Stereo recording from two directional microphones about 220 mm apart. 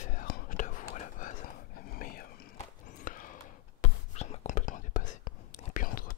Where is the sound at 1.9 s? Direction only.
40° left (ahead or behind).